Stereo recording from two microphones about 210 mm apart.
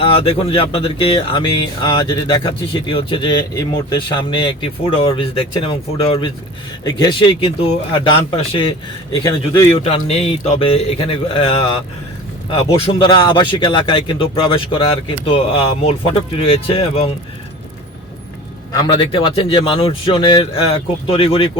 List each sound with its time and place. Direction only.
0.0 s speech: 25° left (ahead or behind)
9.1 s speech: 20° left (ahead or behind)
9.6 s speech: 30° left (ahead or behind)
18.8 s speech: 25° left (ahead or behind)